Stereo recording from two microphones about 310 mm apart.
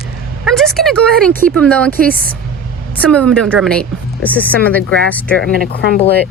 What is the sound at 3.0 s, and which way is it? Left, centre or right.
Speech, centre.